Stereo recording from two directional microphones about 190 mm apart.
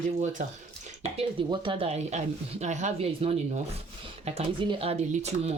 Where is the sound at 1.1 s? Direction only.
25° right (ahead or behind).